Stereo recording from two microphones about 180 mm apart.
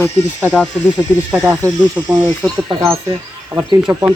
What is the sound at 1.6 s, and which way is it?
Speech, 10° right (ahead or behind).